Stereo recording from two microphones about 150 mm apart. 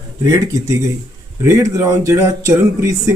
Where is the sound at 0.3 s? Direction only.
20° right (ahead or behind).